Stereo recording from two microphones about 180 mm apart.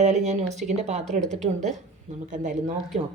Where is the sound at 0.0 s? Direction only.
40° right (ahead or behind).